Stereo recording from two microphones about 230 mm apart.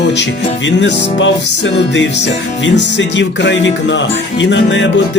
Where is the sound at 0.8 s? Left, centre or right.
Left.